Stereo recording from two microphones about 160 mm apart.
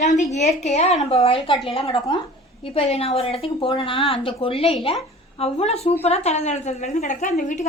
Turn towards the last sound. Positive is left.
turn(degrees=55)  # may be behind; listen again after turning